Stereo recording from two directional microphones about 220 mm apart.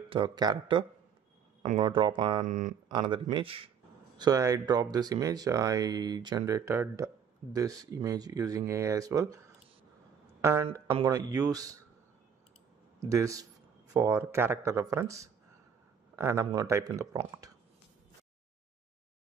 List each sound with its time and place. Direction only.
0.1 s speech: 20° right (ahead or behind)
2.4 s speech: 35° right (ahead or behind)
2.9 s speech: 20° right (ahead or behind)
10.4 s speech: 10° right (ahead or behind)
13.0 s speech: 15° right (ahead or behind)